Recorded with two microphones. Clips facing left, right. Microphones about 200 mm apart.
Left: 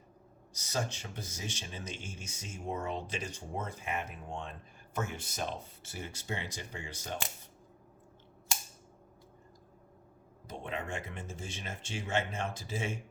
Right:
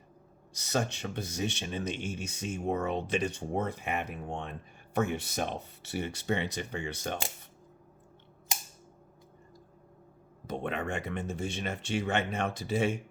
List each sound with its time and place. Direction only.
0.5 s speech: 65° right (ahead or behind)
10.4 s speech: 65° right (ahead or behind)